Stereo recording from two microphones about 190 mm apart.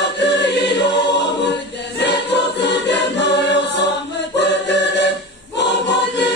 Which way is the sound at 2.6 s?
65° left (ahead or behind).